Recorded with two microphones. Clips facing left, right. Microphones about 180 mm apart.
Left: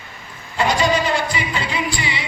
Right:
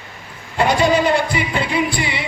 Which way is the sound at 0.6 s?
55° right (ahead or behind).